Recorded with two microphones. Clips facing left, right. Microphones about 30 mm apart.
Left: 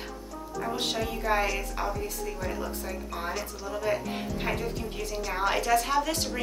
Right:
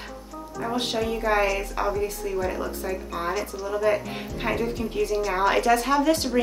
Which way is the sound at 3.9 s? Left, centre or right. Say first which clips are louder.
Right 3 dB; centre.